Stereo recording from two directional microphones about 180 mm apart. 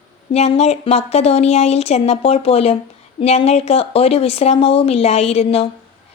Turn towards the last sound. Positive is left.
turn(degrees=35)  # may be behind; listen again after turning